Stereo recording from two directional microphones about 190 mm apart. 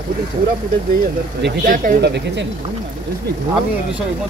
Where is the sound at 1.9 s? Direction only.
60° right (ahead or behind).